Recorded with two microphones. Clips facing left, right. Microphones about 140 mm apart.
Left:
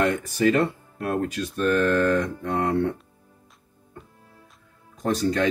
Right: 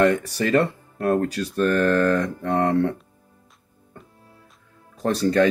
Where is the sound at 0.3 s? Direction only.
40° right (ahead or behind).